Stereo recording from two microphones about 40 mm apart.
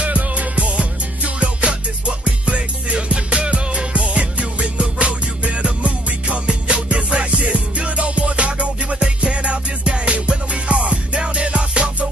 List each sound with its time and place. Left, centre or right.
0.0 s music: right